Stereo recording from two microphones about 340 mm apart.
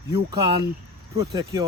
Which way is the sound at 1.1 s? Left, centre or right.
Centre.